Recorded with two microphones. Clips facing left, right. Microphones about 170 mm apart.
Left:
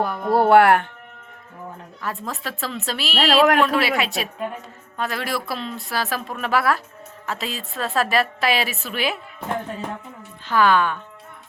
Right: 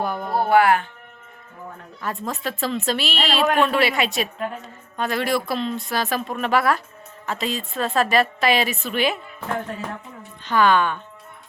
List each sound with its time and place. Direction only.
0.0 s speech: centre (ahead or behind)
0.3 s speech: 80° left
2.0 s a woman's voice: centre (ahead or behind)
10.4 s a woman's voice: 5° left (ahead or behind)